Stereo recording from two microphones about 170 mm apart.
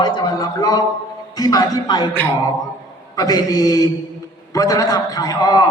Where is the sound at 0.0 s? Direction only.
25° left (ahead or behind).